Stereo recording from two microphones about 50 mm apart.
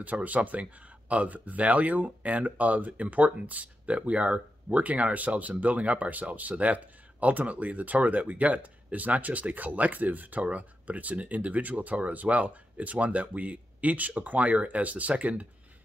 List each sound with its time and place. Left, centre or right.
0.0 s speech: right